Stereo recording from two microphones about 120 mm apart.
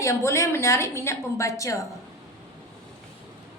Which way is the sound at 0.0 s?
25° left (ahead or behind).